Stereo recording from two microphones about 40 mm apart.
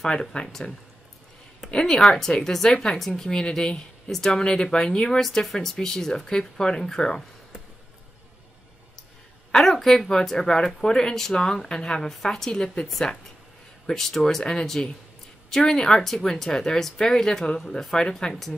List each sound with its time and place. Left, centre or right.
0.0 s speech: centre
2.0 s speech: centre
5.2 s speech: centre
9.5 s speech: centre
13.8 s speech: centre
15.6 s speech: left
16.0 s speech: centre